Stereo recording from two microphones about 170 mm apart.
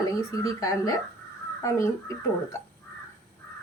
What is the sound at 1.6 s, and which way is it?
Speech, 20° left (ahead or behind).